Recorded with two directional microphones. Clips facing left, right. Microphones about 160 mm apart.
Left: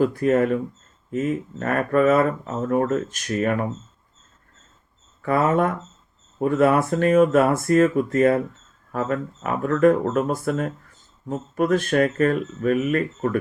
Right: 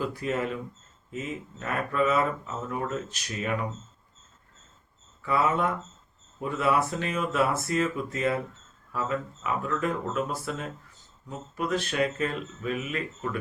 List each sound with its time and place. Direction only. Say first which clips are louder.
0.0 s speech: left 10 dB; 50° left (ahead or behind)
5.2 s speech: left 6 dB; 50° left (ahead or behind)